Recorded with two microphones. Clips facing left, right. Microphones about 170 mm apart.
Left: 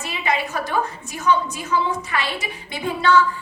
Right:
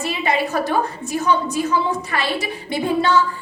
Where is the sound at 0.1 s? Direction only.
35° right (ahead or behind).